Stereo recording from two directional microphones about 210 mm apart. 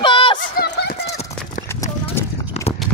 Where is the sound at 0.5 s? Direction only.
50° left (ahead or behind).